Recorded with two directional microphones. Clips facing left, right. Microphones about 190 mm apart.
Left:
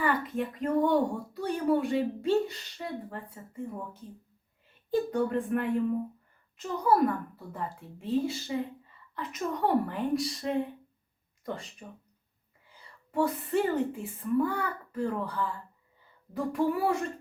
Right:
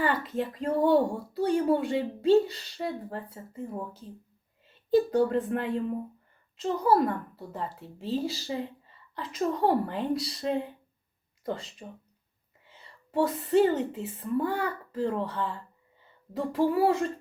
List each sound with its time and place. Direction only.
0.0 s a woman's voice: 30° right (ahead or behind)